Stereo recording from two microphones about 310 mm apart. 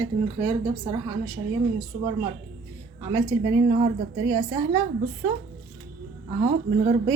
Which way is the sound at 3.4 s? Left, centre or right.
Right.